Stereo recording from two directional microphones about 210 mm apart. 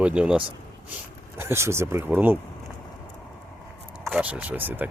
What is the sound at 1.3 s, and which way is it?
Speech, 10° right (ahead or behind).